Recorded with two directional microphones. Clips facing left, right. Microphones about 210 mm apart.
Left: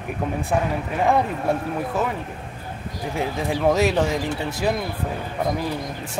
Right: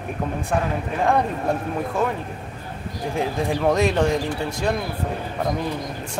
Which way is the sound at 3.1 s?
Centre (ahead or behind).